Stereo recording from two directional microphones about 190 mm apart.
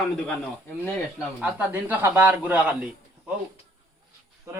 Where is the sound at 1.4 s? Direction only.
10° right (ahead or behind).